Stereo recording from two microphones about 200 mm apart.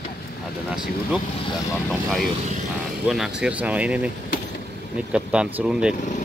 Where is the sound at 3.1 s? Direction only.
5° right (ahead or behind).